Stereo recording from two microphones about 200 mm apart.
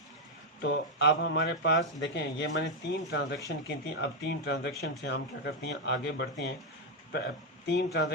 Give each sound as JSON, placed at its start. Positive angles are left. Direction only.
{"t": 0.6, "sound": "speech", "side_deg": 60}